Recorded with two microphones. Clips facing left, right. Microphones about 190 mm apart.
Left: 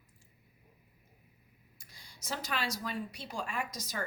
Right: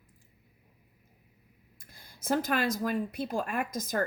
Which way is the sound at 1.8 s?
55° right (ahead or behind).